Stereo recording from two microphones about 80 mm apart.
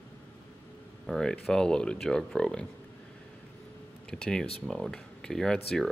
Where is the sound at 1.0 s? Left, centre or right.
Centre.